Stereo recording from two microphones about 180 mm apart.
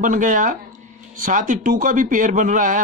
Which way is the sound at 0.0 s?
45° right (ahead or behind).